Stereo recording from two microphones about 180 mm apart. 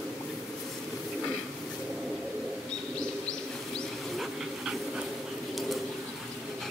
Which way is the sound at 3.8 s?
Centre (ahead or behind).